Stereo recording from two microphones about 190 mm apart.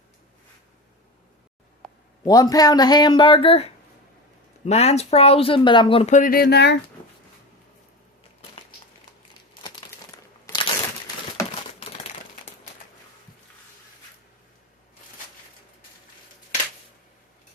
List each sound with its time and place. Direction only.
1.8 s a sound: 5° left (ahead or behind)
2.2 s speech: 20° left (ahead or behind); by 6.7 s 60° left (ahead or behind)
10.4 s crunch: 25° left (ahead or behind)